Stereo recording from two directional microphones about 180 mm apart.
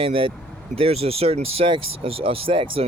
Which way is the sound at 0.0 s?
30° right (ahead or behind).